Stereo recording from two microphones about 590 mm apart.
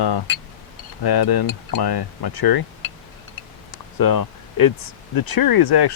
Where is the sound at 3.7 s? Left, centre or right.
Left.